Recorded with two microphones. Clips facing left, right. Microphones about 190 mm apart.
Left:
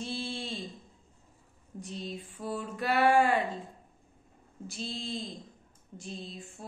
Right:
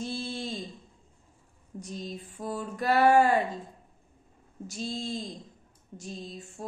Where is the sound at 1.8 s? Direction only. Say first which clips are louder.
Right 1 dB; 40° right (ahead or behind).